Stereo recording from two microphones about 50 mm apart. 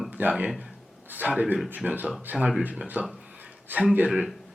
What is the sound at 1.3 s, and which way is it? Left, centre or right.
Speech, right.